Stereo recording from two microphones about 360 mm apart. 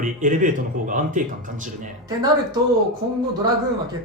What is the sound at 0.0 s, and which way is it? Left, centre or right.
Speech, right.